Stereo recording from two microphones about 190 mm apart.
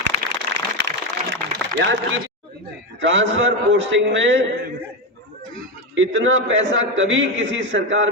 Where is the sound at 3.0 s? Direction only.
80° right.